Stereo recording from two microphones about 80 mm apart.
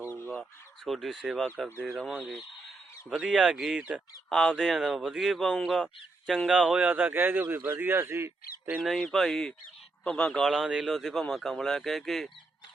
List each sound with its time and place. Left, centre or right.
0.9 s speech: centre
3.1 s speech: centre
4.3 s speech: centre
6.5 s a man's voice: centre; by 8.7 s right
8.7 s a man's voice: centre
10.5 s speech: centre